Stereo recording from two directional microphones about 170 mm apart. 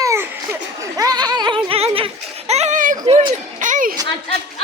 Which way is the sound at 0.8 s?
20° right (ahead or behind).